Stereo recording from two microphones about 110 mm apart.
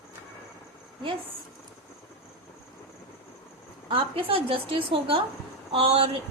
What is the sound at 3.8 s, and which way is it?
A woman's voice, 55° right (ahead or behind).